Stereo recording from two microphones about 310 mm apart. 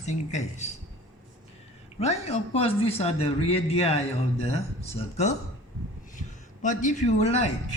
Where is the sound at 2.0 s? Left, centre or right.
Centre.